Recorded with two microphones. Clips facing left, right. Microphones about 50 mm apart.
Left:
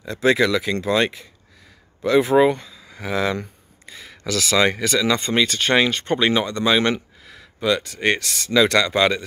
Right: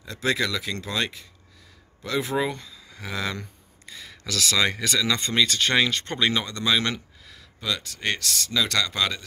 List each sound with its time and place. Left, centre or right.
0.0 s speech: left